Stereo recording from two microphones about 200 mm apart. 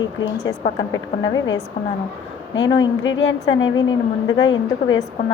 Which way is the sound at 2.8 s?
70° left (ahead or behind).